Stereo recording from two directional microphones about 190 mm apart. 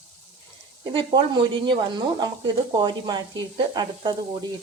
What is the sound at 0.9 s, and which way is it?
Speech, 25° right (ahead or behind).